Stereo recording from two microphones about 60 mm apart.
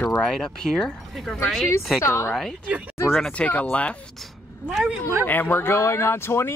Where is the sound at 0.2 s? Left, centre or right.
Centre.